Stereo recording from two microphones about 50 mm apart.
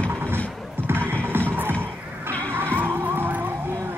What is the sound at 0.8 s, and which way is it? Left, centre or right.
Music, right.